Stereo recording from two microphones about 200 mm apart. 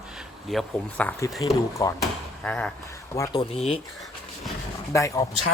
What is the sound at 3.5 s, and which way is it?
Speech, 30° left (ahead or behind).